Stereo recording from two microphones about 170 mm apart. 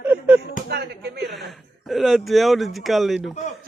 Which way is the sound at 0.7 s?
75° right (ahead or behind).